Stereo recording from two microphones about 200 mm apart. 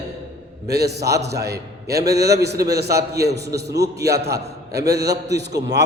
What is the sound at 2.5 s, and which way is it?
Speech, 15° right (ahead or behind).